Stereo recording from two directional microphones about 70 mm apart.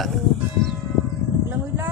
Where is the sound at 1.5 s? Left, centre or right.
Right.